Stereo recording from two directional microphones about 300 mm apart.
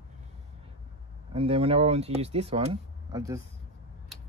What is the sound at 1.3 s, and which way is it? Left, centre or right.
Speech, centre.